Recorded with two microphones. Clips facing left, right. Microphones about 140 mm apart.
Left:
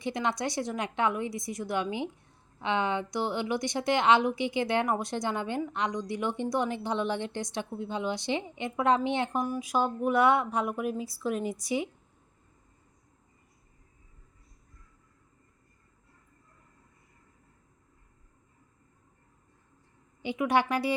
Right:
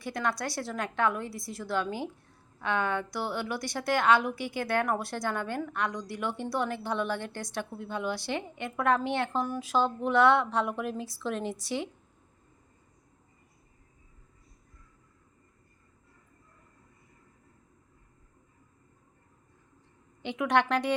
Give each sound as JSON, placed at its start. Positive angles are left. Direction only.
{"t": 0.0, "sound": "a woman's voice", "side_deg": 20}
{"t": 20.2, "sound": "a woman's voice", "side_deg": 10}